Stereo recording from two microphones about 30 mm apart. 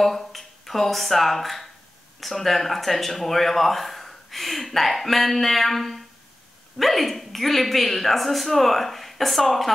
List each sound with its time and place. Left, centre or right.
0.0 s speech: centre